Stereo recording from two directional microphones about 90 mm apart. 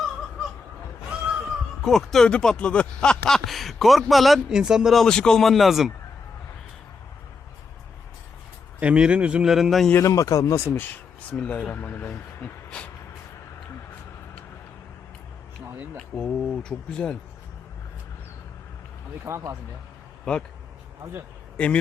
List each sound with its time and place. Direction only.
1.1 s a sound: 10° right (ahead or behind)
1.8 s speech: 5° left (ahead or behind)
5.0 s speech: 5° left (ahead or behind)
8.8 s speech: 10° right (ahead or behind)
10.0 s speech: 40° left (ahead or behind)
10.8 s speech: 15° left (ahead or behind)
16.0 s speech: 10° left (ahead or behind)
19.3 s speech: 30° right (ahead or behind)
20.3 s speech: 5° left (ahead or behind)